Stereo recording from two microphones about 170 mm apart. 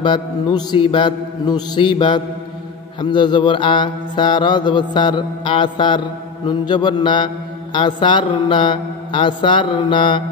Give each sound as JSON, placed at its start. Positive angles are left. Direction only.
{"t": 0.0, "sound": "mantra", "side_deg": 25}